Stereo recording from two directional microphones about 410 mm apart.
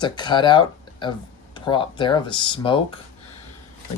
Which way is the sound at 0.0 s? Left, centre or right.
Centre.